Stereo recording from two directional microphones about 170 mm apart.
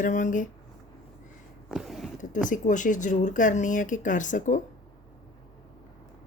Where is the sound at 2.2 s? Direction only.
50° left (ahead or behind).